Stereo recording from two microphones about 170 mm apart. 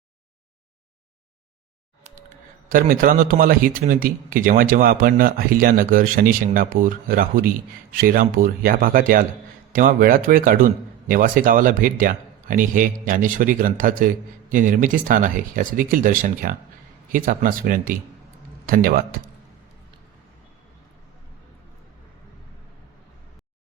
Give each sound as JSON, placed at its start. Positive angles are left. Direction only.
{"t": 2.6, "sound": "speech", "side_deg": -55}